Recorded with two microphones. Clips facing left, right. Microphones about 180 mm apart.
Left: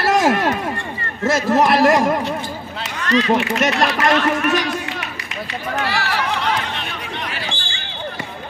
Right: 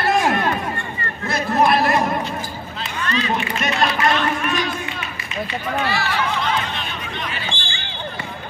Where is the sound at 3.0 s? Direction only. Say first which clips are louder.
Left 6 dB; 80° left.